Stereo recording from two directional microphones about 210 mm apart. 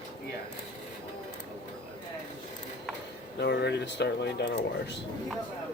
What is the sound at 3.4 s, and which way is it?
Speech, 55° left (ahead or behind).